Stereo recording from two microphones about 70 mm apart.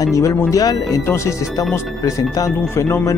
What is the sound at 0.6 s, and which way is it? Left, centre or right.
Speech, left.